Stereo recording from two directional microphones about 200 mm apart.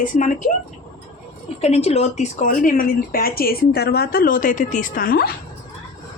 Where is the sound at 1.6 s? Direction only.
30° left (ahead or behind); by 5.3 s 50° left (ahead or behind).